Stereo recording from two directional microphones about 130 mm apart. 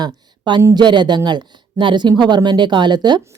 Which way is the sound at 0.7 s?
35° right (ahead or behind).